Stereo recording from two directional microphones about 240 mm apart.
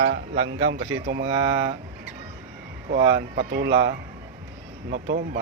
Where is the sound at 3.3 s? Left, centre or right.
Right.